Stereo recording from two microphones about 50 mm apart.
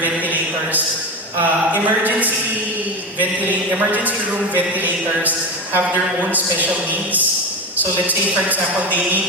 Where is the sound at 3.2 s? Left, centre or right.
Right.